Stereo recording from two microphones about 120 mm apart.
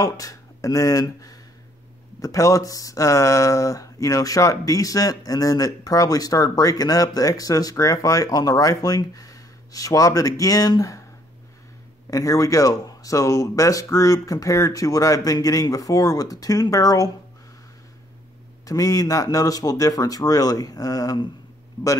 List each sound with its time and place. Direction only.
0.0 s speech: 30° left (ahead or behind)
12.1 s speech: 30° left (ahead or behind)
18.7 s speech: 30° left (ahead or behind)